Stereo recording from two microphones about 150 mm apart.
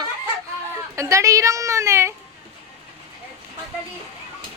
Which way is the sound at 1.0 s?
20° right (ahead or behind).